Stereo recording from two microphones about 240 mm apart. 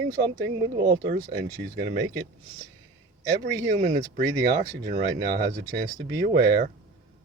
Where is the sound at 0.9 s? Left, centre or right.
Right.